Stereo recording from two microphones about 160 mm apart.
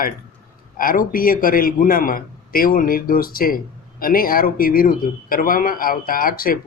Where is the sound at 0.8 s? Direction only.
60° left (ahead or behind).